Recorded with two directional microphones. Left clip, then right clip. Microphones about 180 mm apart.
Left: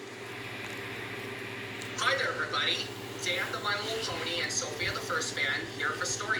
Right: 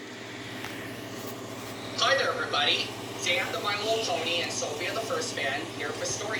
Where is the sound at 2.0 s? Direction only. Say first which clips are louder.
Right 4 dB; 40° left (ahead or behind).